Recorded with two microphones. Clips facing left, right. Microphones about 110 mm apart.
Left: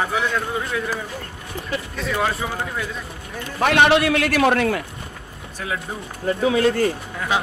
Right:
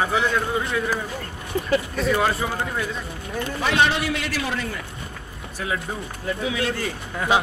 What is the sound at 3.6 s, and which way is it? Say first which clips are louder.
A man's voice: left 6 dB; 65° left (ahead or behind).